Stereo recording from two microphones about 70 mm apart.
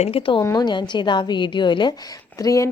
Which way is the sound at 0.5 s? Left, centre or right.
Left.